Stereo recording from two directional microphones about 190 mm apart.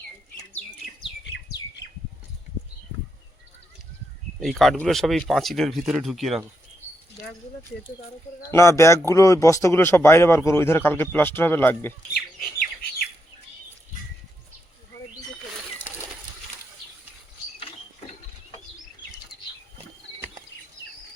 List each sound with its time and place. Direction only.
4.4 s speech: centre (ahead or behind)
8.4 s speech: 15° left (ahead or behind)
12.1 s bird: 55° left (ahead or behind)